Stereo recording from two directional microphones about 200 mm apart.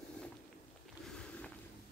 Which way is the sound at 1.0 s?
5° left (ahead or behind).